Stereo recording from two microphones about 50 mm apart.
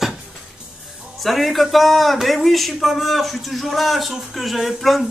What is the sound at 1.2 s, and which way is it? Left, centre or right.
Speech, centre.